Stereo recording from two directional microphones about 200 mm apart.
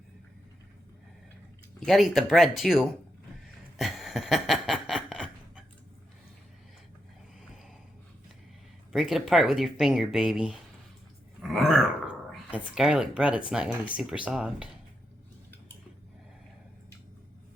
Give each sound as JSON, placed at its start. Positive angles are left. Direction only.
{"t": 1.8, "sound": "speech", "side_deg": 0}
{"t": 3.8, "sound": "a sound", "side_deg": 0}
{"t": 8.9, "sound": "speech", "side_deg": 0}